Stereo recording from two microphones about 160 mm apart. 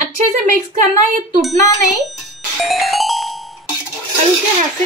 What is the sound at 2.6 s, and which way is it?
Music, centre (ahead or behind).